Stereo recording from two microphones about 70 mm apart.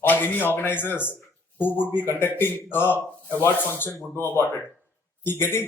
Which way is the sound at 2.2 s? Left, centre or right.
Left.